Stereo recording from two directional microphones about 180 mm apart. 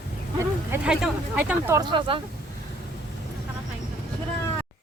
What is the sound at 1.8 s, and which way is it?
Speech, 25° right (ahead or behind).